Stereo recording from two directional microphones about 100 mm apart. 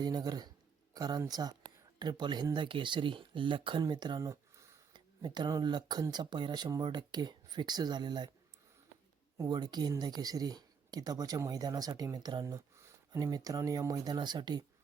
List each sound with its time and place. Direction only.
0.0 s speech: 45° right (ahead or behind)
4.2 s a sound: 30° right (ahead or behind)
4.9 s speech: 45° right (ahead or behind)
9.5 s speech: 45° right (ahead or behind)